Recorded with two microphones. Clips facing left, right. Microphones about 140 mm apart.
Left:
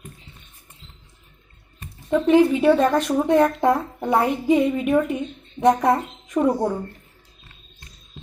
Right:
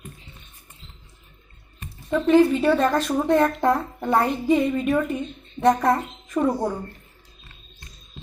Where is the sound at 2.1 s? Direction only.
15° left (ahead or behind).